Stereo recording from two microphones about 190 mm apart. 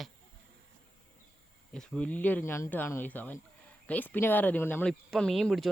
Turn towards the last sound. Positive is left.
turn(degrees=0)  # may be behind; listen again after turning